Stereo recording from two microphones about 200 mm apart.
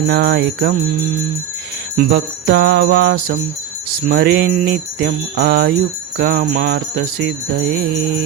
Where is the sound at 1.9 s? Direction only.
50° right (ahead or behind).